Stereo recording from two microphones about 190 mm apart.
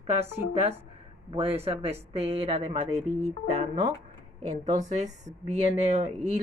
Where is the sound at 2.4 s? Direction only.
30° right (ahead or behind).